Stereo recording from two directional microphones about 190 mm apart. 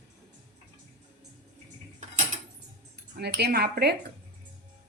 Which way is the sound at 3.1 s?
55° right (ahead or behind).